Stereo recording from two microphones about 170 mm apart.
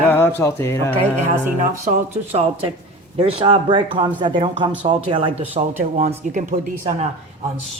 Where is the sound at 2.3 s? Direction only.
35° right (ahead or behind).